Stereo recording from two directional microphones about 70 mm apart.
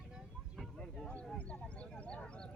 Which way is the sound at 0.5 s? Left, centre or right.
Centre.